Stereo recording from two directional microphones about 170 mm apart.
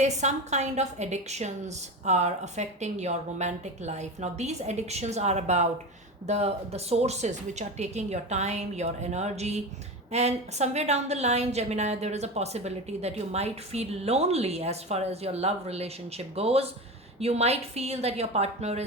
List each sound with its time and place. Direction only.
0.0 s a woman's voice: 45° right (ahead or behind)